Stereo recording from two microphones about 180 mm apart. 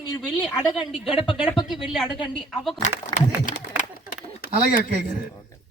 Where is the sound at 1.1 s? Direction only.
30° left (ahead or behind).